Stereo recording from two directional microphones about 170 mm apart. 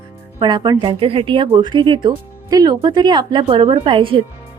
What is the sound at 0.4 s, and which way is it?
Speech, 25° right (ahead or behind).